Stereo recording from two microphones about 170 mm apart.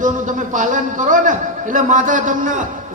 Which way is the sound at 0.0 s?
50° right (ahead or behind).